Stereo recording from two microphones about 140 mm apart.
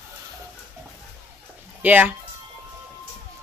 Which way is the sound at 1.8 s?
10° right (ahead or behind).